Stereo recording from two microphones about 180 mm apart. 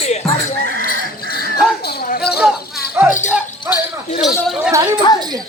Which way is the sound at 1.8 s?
60° left (ahead or behind).